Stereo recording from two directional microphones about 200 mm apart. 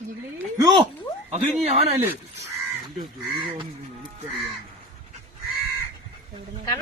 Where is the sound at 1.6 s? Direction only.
30° right (ahead or behind).